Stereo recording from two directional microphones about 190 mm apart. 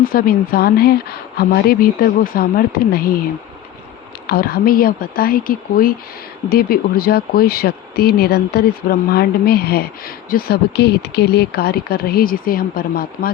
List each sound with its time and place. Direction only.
0.0 s speech: 50° left (ahead or behind)
4.3 s speech: 50° left (ahead or behind)